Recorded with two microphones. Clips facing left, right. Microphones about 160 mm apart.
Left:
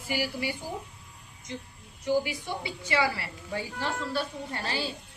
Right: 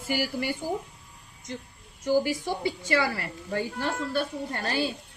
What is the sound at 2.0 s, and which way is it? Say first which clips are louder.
A woman's voice: right 3 dB; 45° right (ahead or behind).